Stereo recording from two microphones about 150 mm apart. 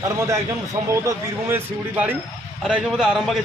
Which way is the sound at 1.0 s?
15° right (ahead or behind).